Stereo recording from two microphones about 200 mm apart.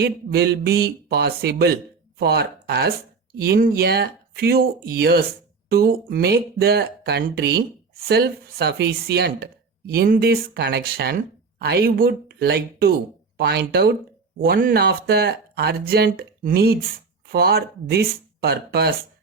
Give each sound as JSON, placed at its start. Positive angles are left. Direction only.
{"t": 0.0, "sound": "speech", "side_deg": -55}